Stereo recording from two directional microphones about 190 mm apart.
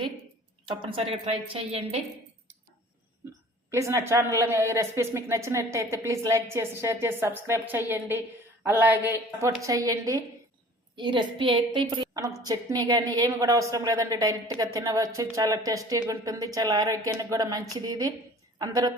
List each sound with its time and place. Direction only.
0.7 s speech: 30° right (ahead or behind)
3.7 s a woman's voice: 15° right (ahead or behind)